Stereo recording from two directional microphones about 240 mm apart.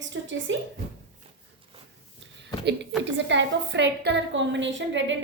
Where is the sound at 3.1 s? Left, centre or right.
Right.